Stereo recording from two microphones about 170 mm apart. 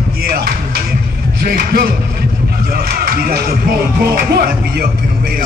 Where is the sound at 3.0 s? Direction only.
60° right (ahead or behind).